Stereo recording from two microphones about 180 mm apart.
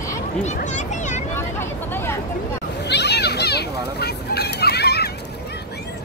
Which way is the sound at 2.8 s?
70° left (ahead or behind).